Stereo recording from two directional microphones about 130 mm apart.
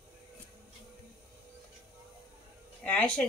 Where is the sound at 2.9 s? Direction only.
10° left (ahead or behind).